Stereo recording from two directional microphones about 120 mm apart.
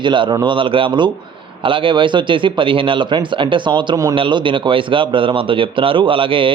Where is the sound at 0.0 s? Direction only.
40° right (ahead or behind).